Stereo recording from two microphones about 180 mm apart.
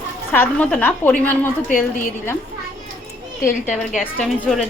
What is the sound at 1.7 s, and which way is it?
Speech, 50° left (ahead or behind).